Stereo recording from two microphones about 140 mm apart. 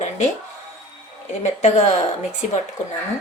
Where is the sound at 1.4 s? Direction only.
50° left (ahead or behind).